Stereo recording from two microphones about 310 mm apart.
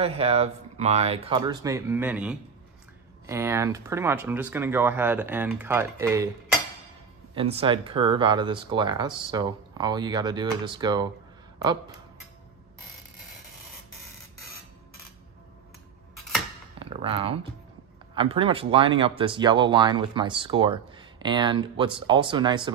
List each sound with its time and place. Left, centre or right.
0.0 s speech: centre
7.3 s speech: centre
16.8 s speech: centre